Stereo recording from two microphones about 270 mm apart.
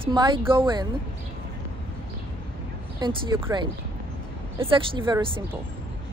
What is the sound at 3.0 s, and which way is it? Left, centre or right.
A woman's voice, centre.